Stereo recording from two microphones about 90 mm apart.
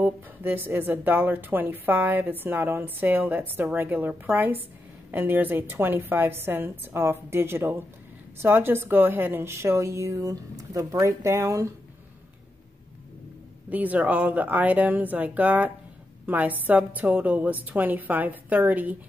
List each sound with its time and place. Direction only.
0.0 s a woman's voice: 25° right (ahead or behind)
13.7 s a woman's voice: 15° right (ahead or behind)